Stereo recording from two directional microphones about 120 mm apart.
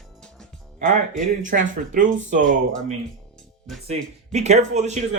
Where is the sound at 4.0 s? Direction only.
65° right (ahead or behind).